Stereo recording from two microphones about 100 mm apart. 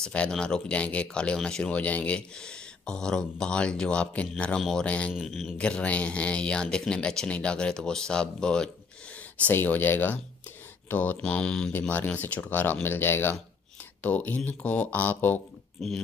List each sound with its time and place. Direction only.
0.0 s speech: 10° left (ahead or behind)